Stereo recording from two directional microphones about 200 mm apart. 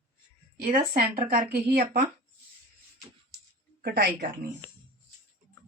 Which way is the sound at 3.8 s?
50° right (ahead or behind).